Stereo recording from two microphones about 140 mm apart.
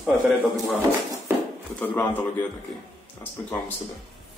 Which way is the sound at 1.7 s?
10° left (ahead or behind).